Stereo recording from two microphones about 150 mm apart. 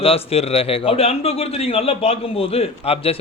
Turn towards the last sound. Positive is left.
turn(degrees=40)  # may be behind; listen again after turning